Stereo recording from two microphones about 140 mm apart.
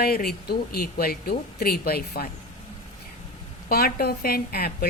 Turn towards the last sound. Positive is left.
turn(degrees=90)